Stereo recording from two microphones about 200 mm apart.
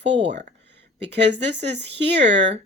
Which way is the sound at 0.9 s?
60° right (ahead or behind).